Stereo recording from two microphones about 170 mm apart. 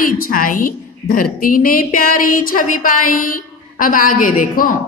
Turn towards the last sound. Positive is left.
turn(degrees=50)  # may be behind; listen again after turning